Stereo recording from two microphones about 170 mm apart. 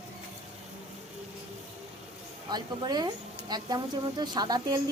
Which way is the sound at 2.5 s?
25° right (ahead or behind).